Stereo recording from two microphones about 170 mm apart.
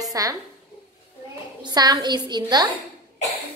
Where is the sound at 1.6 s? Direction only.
25° right (ahead or behind).